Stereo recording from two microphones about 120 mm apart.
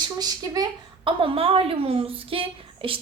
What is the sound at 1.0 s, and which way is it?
A woman's voice, 50° right (ahead or behind).